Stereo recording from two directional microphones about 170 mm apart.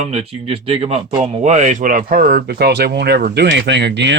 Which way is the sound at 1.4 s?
45° right (ahead or behind).